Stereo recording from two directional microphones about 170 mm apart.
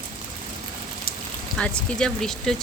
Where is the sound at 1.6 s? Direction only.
5° left (ahead or behind).